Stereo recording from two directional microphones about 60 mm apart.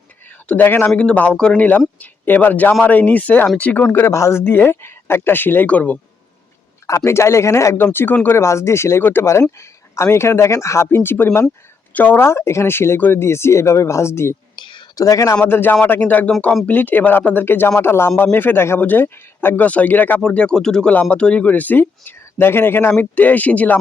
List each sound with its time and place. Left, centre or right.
0.6 s speech: left
0.9 s speech: left
2.0 s speech: left
4.0 s speech: left
4.4 s speech: left
6.8 s speech: left
14.9 s a man's voice: left
15.4 s speech: left
15.7 s speech: left
18.8 s speech: left
19.6 s speech: left
20.2 s speech: centre
20.9 s speech: left